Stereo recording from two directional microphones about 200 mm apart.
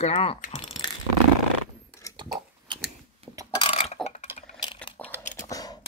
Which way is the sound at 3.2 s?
30° right (ahead or behind).